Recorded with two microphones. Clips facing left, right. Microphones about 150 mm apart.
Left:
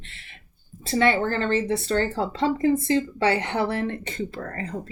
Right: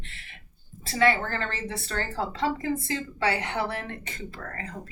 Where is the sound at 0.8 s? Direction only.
25° left (ahead or behind).